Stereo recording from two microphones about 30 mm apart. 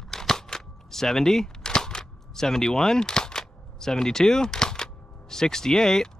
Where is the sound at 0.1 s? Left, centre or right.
Centre.